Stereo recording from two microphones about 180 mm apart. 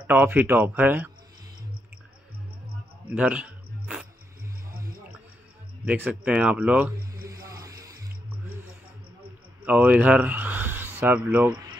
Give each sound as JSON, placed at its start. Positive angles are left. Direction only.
{"t": 0.0, "sound": "speech", "side_deg": -10}
{"t": 3.1, "sound": "music", "side_deg": -5}
{"t": 5.9, "sound": "speech", "side_deg": -5}
{"t": 7.2, "sound": "music", "side_deg": -20}
{"t": 9.7, "sound": "speech", "side_deg": -10}